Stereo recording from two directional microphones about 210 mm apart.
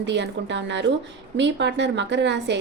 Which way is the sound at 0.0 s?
55° right (ahead or behind).